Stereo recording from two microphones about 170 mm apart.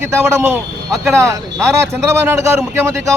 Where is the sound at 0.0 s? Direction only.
15° right (ahead or behind).